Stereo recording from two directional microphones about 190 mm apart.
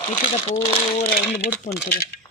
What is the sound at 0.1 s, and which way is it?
Speech, 30° left (ahead or behind).